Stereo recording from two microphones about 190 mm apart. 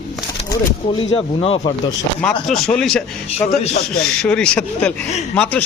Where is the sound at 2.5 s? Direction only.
5° left (ahead or behind).